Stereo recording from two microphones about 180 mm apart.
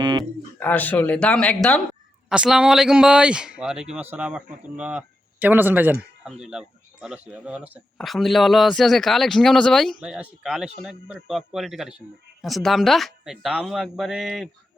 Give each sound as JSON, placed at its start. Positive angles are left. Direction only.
{"t": 0.0, "sound": "a sound", "side_deg": -25}
{"t": 0.6, "sound": "speech", "side_deg": 10}
{"t": 2.3, "sound": "a man's voice", "side_deg": -5}